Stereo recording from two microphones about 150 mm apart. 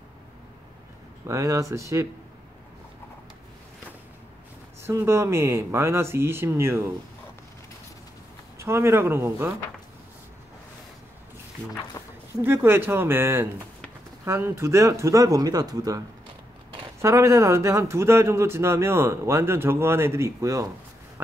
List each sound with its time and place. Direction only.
1.2 s speech: 20° right (ahead or behind)
4.8 s speech: 15° right (ahead or behind)
8.5 s speech: 15° right (ahead or behind)
12.0 s a sound: 20° left (ahead or behind)
12.4 s speech: 15° right (ahead or behind)
17.0 s speech: 20° right (ahead or behind)